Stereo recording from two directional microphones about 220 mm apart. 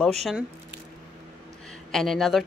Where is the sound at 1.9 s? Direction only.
Centre (ahead or behind).